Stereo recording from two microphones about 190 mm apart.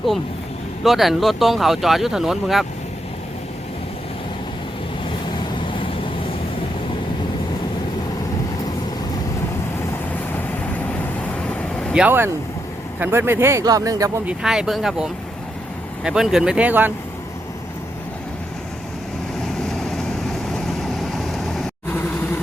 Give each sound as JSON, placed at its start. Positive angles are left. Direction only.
{"t": 0.9, "sound": "speech", "side_deg": 0}
{"t": 5.5, "sound": "vehicle", "side_deg": 25}
{"t": 11.4, "sound": "vehicle", "side_deg": 5}
{"t": 12.0, "sound": "speech", "side_deg": -10}
{"t": 14.3, "sound": "speech", "side_deg": -5}
{"t": 21.0, "sound": "vehicle", "side_deg": 0}